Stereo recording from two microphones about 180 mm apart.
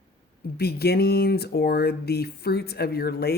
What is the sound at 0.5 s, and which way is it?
Speech, 60° left (ahead or behind).